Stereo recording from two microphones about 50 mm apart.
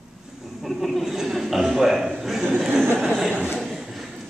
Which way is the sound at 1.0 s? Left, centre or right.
Centre.